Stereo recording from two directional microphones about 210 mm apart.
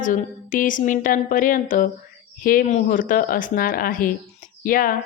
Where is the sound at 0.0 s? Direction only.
40° left (ahead or behind).